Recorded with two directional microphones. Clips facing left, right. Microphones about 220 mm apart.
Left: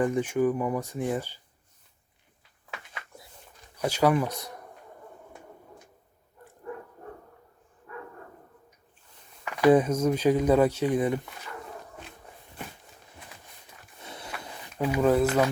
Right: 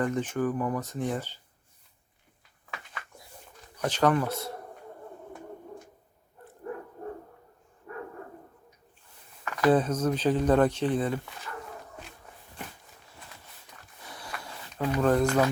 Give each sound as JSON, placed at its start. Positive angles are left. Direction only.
{"t": 0.0, "sound": "speech", "side_deg": 10}
{"t": 3.8, "sound": "speech", "side_deg": 10}
{"t": 9.4, "sound": "speech", "side_deg": 10}
{"t": 14.0, "sound": "walk", "side_deg": 25}
{"t": 14.4, "sound": "speech", "side_deg": 15}